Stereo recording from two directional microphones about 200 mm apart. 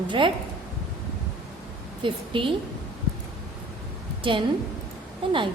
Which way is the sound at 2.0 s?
25° right (ahead or behind).